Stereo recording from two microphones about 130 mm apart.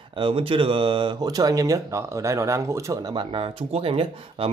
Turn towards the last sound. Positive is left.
turn(degrees=-45)  # may be behind; listen again after turning